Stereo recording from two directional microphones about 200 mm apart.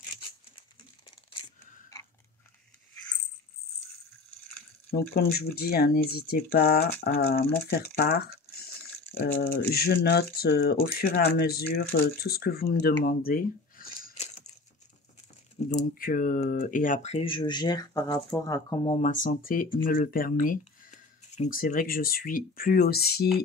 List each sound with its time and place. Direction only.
4.9 s speech: 50° left (ahead or behind)
9.2 s speech: 50° left (ahead or behind)
15.7 s speech: 45° left (ahead or behind); by 18.9 s 15° left (ahead or behind)
18.9 s speech: 40° left (ahead or behind)